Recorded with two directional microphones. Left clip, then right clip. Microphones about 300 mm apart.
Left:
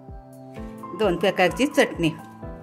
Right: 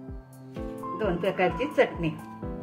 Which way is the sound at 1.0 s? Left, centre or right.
Left.